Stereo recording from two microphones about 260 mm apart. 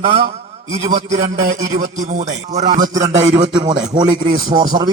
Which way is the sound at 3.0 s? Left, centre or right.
Centre.